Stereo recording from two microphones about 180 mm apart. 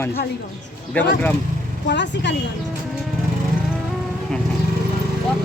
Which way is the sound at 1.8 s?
75° left (ahead or behind).